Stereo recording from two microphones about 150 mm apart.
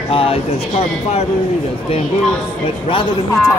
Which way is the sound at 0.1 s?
40° left (ahead or behind).